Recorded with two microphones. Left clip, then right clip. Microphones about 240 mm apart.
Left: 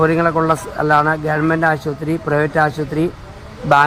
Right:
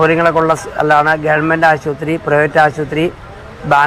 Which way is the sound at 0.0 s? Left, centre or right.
Left.